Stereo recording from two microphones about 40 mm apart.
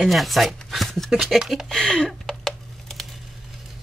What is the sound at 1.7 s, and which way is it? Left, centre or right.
Speech, left.